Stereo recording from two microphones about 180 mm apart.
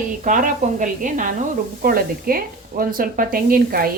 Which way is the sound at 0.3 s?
45° right (ahead or behind).